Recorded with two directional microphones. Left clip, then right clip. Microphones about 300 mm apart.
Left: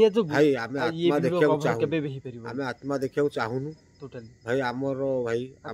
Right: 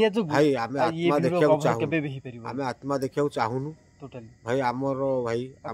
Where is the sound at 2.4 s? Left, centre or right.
Centre.